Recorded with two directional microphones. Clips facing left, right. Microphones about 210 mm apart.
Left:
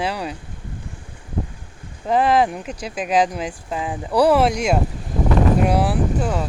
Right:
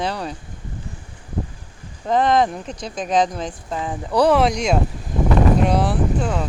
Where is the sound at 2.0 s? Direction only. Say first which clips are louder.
Even; 5° left (ahead or behind).